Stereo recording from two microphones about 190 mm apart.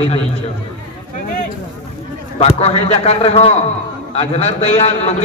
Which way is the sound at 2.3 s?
35° left (ahead or behind).